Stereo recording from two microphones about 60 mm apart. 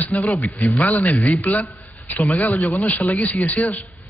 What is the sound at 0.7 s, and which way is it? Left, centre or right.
A man's voice, left.